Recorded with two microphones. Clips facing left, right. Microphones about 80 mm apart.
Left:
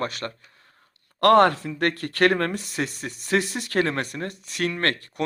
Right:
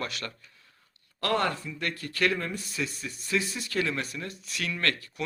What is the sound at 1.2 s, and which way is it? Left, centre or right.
Speech, left.